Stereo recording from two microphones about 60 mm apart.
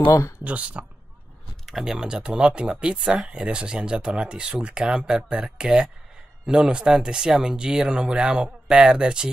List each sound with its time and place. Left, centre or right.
0.4 s speech: right
1.7 s speech: centre